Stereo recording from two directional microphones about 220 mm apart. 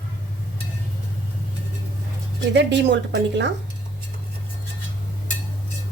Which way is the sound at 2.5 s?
55° right (ahead or behind).